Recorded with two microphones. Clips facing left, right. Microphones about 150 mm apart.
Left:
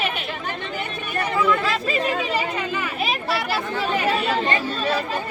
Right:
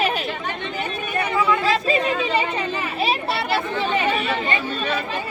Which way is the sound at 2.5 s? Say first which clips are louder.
Right 1 dB; 35° right (ahead or behind).